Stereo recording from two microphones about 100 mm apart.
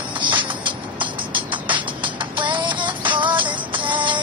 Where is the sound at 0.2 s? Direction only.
50° right (ahead or behind).